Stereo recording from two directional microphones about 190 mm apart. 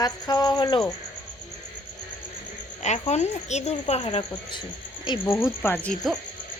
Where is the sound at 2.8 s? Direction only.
35° left (ahead or behind).